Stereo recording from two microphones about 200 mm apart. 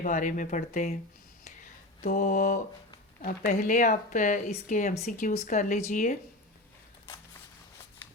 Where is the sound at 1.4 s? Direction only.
40° left (ahead or behind).